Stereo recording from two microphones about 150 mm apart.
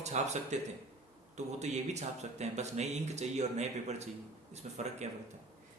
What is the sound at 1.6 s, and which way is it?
A man's voice, 50° right (ahead or behind).